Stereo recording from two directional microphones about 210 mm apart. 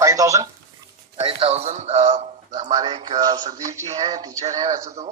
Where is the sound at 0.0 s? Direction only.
15° right (ahead or behind).